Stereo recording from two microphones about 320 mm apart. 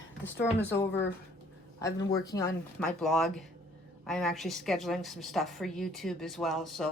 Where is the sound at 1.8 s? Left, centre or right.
Centre.